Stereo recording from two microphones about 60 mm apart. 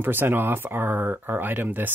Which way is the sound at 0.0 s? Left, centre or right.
Right.